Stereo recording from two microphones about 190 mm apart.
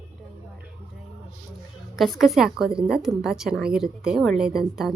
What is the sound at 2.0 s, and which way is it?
A woman's voice, centre (ahead or behind).